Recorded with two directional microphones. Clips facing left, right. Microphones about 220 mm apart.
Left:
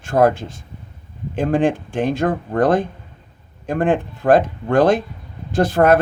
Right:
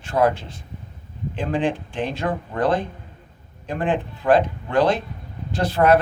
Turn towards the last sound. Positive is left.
turn(degrees=50)  # may be behind; listen again after turning